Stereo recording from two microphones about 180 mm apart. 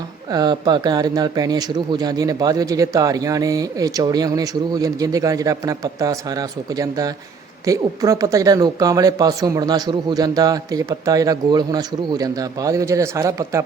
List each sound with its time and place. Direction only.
0.3 s speech: 20° right (ahead or behind)